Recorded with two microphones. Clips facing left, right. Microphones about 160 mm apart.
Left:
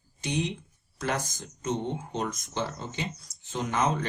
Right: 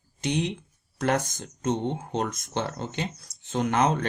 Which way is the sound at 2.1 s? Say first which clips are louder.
Right 3 dB; 60° right (ahead or behind).